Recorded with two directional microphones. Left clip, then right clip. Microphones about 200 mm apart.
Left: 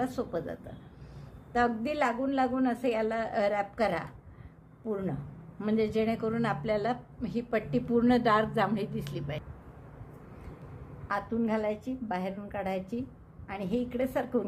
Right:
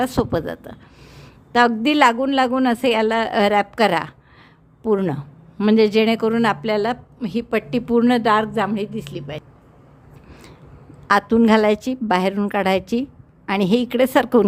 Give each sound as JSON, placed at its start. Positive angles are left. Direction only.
{"t": 0.0, "sound": "a woman's voice", "side_deg": -45}
{"t": 11.1, "sound": "a woman's voice", "side_deg": -55}